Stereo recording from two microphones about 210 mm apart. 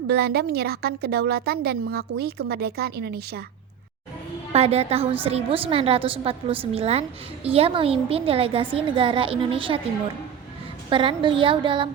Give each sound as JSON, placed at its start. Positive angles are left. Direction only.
{"t": 0.1, "sound": "a woman's voice", "side_deg": -50}
{"t": 4.5, "sound": "a woman's voice", "side_deg": -30}
{"t": 10.8, "sound": "a woman's voice", "side_deg": -25}